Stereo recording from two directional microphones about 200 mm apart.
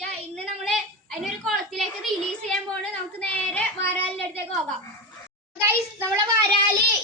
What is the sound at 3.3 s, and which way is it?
Child singing, 5° left (ahead or behind).